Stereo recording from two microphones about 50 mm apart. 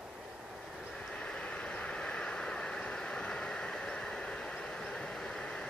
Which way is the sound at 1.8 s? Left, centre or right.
Centre.